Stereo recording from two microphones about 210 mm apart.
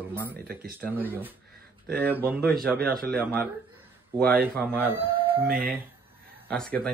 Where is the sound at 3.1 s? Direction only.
5° left (ahead or behind).